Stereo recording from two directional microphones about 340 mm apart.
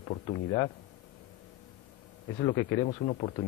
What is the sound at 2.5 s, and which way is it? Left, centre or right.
Speech, centre.